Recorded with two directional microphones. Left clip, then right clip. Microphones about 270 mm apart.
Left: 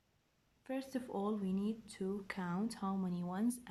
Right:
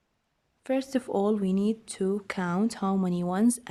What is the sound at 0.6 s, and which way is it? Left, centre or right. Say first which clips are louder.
Speech: right 14 dB; right.